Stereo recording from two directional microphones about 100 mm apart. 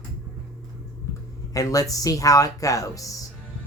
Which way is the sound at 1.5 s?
35° left (ahead or behind).